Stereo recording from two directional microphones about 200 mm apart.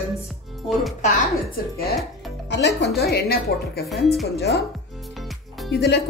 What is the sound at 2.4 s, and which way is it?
Speech, 60° left (ahead or behind).